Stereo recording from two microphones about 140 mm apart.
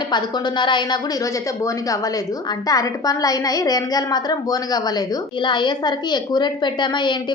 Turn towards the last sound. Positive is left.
turn(degrees=35)  # may be behind; listen again after turning